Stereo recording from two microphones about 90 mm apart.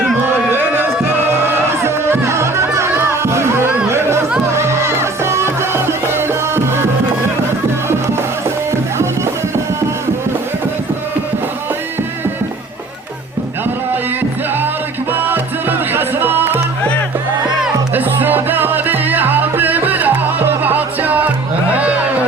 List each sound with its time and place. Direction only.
0.0 s run: 20° right (ahead or behind)
1.3 s music: 25° right (ahead or behind)
15.1 s music: 25° right (ahead or behind)
17.9 s music: 20° right (ahead or behind)